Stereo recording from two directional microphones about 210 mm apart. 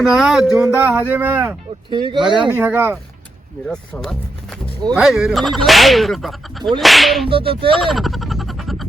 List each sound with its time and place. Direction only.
0.0 s speech: centre (ahead or behind)
1.9 s whip: 20° right (ahead or behind)
2.6 s speech: 10° right (ahead or behind)
3.7 s speech: 5° left (ahead or behind)
7.3 s whip: 25° right (ahead or behind)
7.8 s a sound: centre (ahead or behind)